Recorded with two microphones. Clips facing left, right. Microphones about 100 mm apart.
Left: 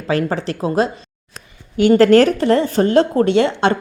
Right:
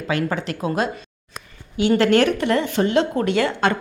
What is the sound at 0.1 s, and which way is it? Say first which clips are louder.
Speech: left 4 dB; 35° left (ahead or behind).